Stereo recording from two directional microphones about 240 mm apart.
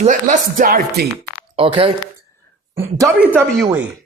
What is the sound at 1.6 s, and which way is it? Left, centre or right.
Speech, right.